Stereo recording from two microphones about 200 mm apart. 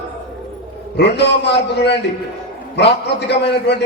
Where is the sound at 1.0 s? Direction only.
60° left (ahead or behind).